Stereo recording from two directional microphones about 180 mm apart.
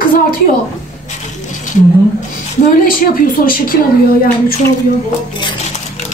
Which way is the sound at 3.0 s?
50° left (ahead or behind).